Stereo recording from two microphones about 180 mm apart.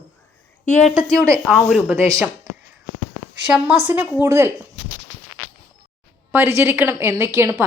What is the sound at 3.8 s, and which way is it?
Speech, 10° right (ahead or behind).